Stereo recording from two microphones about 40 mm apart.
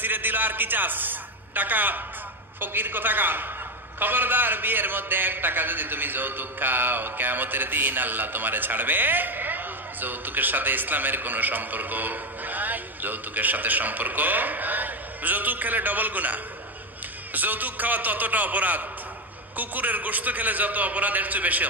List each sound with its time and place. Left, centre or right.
0.0 s a man's voice: right